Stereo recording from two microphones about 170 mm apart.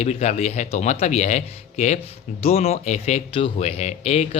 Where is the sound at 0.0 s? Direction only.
40° left (ahead or behind).